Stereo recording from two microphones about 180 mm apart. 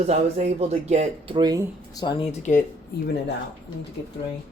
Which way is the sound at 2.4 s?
45° left (ahead or behind).